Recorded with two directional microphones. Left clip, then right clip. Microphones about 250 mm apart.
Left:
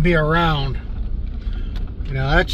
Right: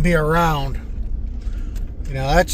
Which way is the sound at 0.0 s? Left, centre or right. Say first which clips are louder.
Even; right.